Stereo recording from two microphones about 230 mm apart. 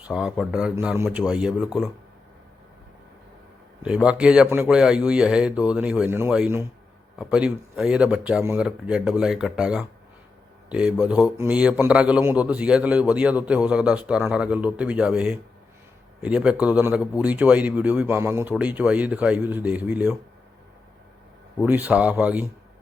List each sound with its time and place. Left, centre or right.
0.1 s a man's voice: centre
3.8 s a man's voice: centre
21.6 s speech: centre